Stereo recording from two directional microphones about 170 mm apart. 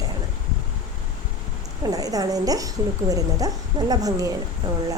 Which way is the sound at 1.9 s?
20° right (ahead or behind).